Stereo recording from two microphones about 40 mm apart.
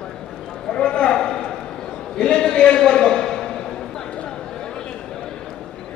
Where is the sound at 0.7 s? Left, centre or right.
Left.